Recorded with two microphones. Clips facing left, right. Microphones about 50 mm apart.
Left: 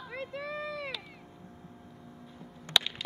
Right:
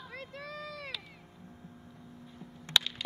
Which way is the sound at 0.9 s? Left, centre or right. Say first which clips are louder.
Left 2 dB; centre.